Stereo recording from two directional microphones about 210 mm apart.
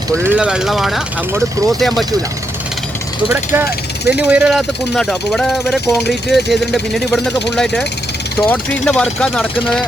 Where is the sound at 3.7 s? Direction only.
50° left (ahead or behind).